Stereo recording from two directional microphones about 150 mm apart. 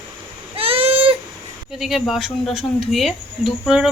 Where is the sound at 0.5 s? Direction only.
40° right (ahead or behind).